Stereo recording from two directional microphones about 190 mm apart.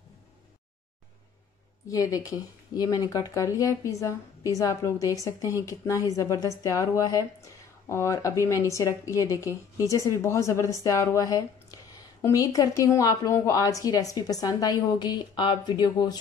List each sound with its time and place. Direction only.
1.9 s speech: 20° left (ahead or behind)